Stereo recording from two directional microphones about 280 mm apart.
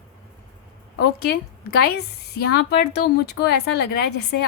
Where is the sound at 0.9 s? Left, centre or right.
Left.